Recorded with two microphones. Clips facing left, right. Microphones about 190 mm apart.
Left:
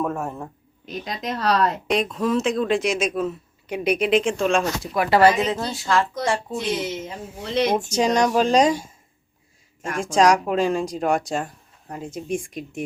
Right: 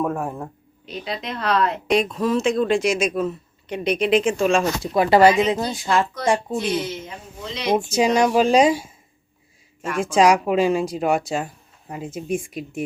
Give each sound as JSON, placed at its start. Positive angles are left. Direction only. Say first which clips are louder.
{"t": 0.0, "sound": "speech", "louder": "right 2 dB", "side_deg": 0}
{"t": 0.9, "sound": "a woman's voice", "louder": "even", "side_deg": 45}
{"t": 1.9, "sound": "speech", "louder": "right 4 dB", "side_deg": 0}
{"t": 4.8, "sound": "speech", "louder": "right 3 dB", "side_deg": -25}
{"t": 7.4, "sound": "speech", "louder": "left 9 dB", "side_deg": 55}
{"t": 7.7, "sound": "speech", "louder": "right 8 dB", "side_deg": -10}
{"t": 10.0, "sound": "speech", "louder": "right 1 dB", "side_deg": -5}